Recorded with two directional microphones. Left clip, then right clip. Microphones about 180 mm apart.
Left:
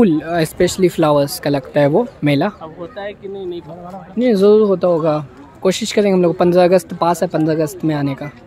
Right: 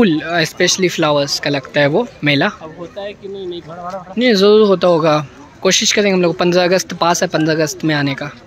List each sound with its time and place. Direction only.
0.0 s speech: 10° left (ahead or behind)
4.2 s speech: 10° left (ahead or behind)
5.6 s speech: 15° left (ahead or behind)